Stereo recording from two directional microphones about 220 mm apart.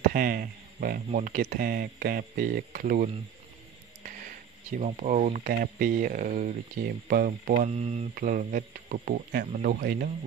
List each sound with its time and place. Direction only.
0.1 s speech: 40° right (ahead or behind)
4.7 s speech: 35° right (ahead or behind)